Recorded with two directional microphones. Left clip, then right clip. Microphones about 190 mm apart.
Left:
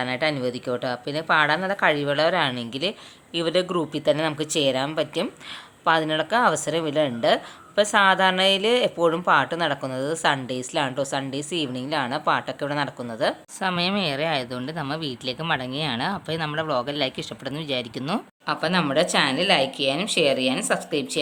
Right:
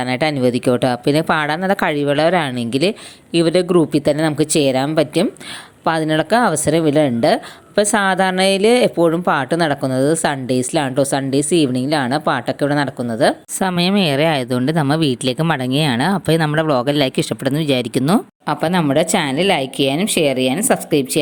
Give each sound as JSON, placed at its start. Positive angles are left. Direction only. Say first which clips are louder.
{"t": 0.0, "sound": "speech", "louder": "right 7 dB", "side_deg": -35}